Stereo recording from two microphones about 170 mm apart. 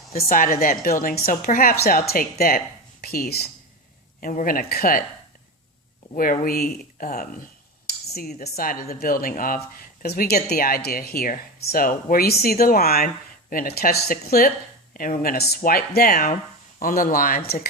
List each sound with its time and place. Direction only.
0.2 s speech: 55° left (ahead or behind)
6.1 s speech: 55° left (ahead or behind)